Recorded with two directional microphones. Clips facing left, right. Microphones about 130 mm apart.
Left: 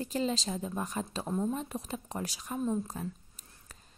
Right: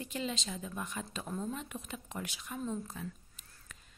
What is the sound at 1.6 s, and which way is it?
A woman's voice, 35° left (ahead or behind).